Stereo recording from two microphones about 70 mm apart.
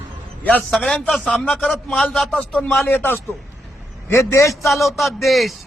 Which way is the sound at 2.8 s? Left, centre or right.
Left.